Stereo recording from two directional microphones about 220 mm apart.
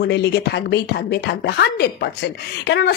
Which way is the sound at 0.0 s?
50° left (ahead or behind).